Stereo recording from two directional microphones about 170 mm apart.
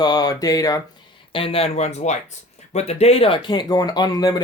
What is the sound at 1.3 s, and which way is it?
Speech, 35° left (ahead or behind).